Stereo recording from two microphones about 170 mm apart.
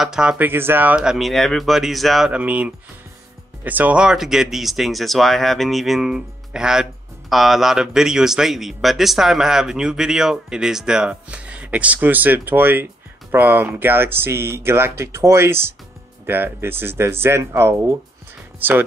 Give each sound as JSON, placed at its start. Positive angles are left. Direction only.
{"t": 0.0, "sound": "speech", "side_deg": -5}